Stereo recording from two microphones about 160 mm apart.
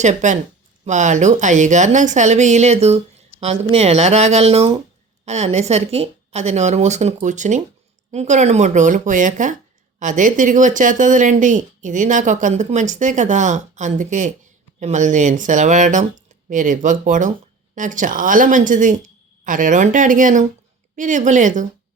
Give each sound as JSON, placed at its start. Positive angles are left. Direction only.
{"t": 0.0, "sound": "speech", "side_deg": -50}